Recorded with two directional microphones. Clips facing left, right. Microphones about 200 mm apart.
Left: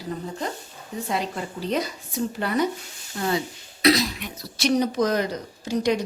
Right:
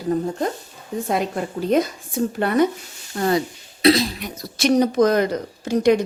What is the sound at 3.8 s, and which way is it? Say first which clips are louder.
Speech: right 4 dB; 30° right (ahead or behind).